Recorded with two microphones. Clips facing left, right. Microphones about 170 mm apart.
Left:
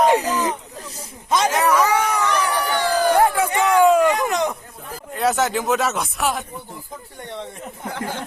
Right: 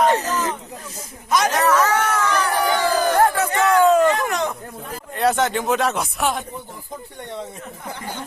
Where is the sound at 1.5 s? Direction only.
10° left (ahead or behind).